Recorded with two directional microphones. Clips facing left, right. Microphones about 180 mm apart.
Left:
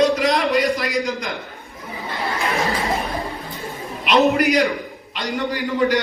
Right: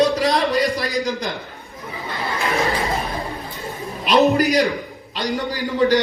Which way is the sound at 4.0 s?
35° right (ahead or behind).